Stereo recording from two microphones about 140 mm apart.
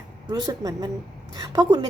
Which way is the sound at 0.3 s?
30° right (ahead or behind).